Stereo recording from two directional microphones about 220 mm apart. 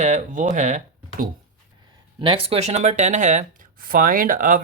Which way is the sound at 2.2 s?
25° right (ahead or behind).